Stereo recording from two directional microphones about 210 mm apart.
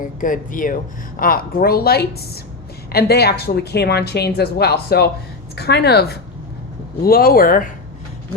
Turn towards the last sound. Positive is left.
turn(degrees=45)  # may be behind; listen again after turning